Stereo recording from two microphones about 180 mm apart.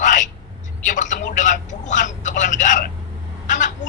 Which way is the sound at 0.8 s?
45° left (ahead or behind).